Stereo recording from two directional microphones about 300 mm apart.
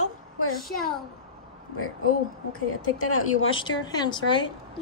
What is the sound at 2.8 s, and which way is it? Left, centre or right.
Speech, left.